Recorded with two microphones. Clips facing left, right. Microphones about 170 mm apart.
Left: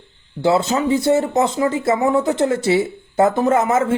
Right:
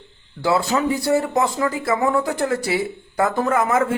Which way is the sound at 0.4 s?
20° left (ahead or behind).